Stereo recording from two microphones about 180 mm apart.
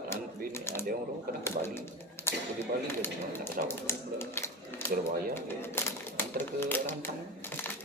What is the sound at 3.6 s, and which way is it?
Speech, 55° right (ahead or behind).